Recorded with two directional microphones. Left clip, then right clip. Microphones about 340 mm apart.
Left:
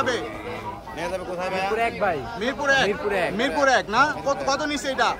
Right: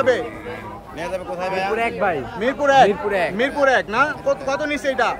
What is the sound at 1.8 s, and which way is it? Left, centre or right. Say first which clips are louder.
Speech: right 2 dB; right.